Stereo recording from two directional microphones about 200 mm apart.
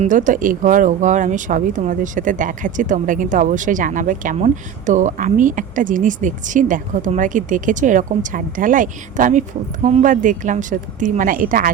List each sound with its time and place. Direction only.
0.0 s speech: 40° right (ahead or behind)